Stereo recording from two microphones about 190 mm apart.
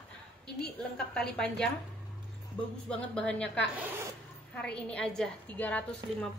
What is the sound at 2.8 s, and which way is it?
Speech, 5° left (ahead or behind).